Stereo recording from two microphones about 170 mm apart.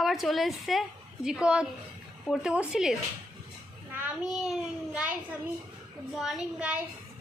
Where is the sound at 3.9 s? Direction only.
5° right (ahead or behind).